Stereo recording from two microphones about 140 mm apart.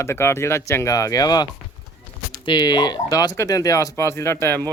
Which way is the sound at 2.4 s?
30° left (ahead or behind).